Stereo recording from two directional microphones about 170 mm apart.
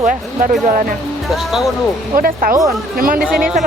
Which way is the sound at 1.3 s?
Centre (ahead or behind).